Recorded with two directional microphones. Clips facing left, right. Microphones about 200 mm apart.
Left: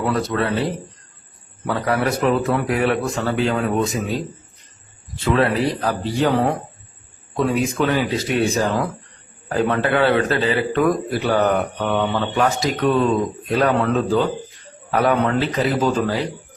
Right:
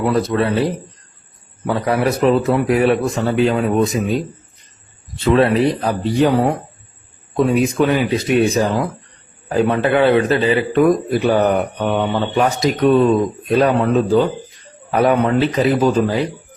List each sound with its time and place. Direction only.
0.3 s a man's voice: 15° right (ahead or behind)
1.6 s a man's voice: 15° right (ahead or behind)
5.2 s a man's voice: 25° right (ahead or behind)